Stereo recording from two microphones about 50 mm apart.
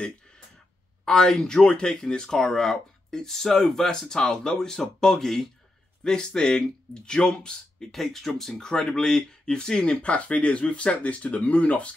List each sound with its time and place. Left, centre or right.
1.0 s speech: centre
10.0 s speech: left